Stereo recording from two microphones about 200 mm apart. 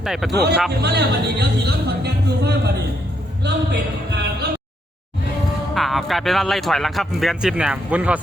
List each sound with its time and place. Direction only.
0.0 s speech: centre (ahead or behind)
0.8 s speech: 55° right (ahead or behind)
5.7 s speech: centre (ahead or behind)